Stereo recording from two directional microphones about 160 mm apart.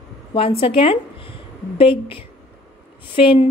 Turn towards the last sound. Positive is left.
turn(degrees=35)  # may be behind; listen again after turning